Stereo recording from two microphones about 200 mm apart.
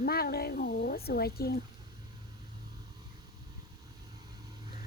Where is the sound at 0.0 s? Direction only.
50° left (ahead or behind).